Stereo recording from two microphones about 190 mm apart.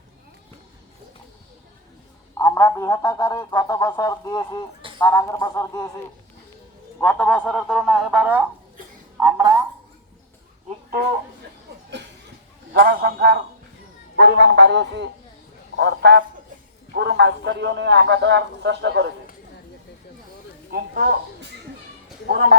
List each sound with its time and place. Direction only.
2.4 s speech: 15° left (ahead or behind)
7.0 s speech: 5° left (ahead or behind)
9.1 s a woman's voice: 20° right (ahead or behind)
12.7 s a man's voice: 55° right (ahead or behind)
20.7 s speech: 50° right (ahead or behind)
22.3 s speech: 50° right (ahead or behind)